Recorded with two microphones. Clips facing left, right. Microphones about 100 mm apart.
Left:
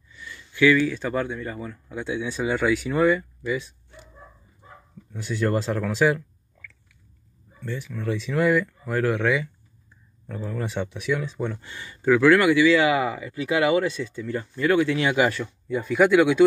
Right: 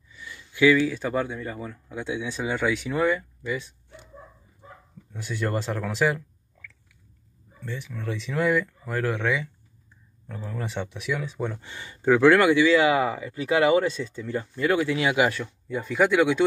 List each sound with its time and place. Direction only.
0.1 s speech: 15° right (ahead or behind); by 3.6 s 5° left (ahead or behind)
5.1 s speech: centre (ahead or behind)
7.6 s speech: centre (ahead or behind)
10.5 s speech: centre (ahead or behind)
11.6 s speech: 25° right (ahead or behind)
12.9 s speech: 40° right (ahead or behind)
14.1 s speech: 20° right (ahead or behind); by 16.4 s 5° left (ahead or behind)